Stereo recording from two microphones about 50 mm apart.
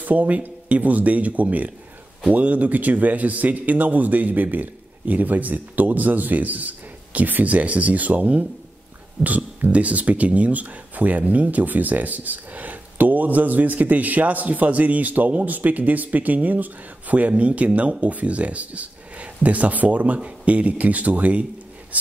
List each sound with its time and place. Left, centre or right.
0.0 s speech: right